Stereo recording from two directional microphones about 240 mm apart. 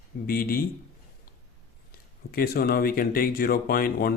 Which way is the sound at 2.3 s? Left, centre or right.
Left.